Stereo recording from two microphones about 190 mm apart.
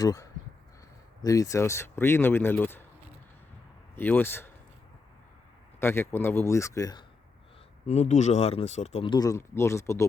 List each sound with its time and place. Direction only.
0.0 s speech: 20° left (ahead or behind)
3.9 s a man's voice: 10° left (ahead or behind)
5.8 s speech: 10° left (ahead or behind)
7.9 s speech: 35° left (ahead or behind)
9.1 s speech: 20° left (ahead or behind)